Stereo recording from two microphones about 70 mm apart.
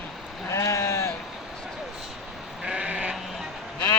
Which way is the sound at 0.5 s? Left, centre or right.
Left.